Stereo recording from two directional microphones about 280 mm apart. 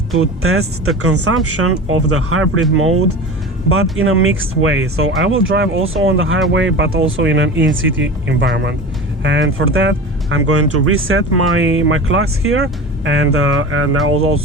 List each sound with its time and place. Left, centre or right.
0.2 s speech: right